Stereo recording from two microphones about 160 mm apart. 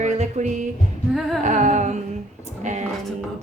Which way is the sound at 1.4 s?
50° right (ahead or behind).